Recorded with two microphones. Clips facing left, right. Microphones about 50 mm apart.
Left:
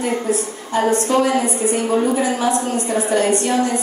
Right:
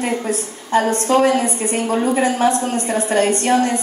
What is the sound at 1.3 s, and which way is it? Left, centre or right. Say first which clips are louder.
Speech: right 1 dB; left.